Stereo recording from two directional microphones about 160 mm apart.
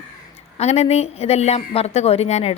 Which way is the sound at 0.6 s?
40° left (ahead or behind).